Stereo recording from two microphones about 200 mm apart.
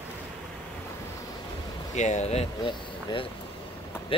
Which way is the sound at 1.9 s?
35° left (ahead or behind).